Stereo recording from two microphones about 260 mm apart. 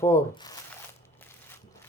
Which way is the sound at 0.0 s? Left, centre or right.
Centre.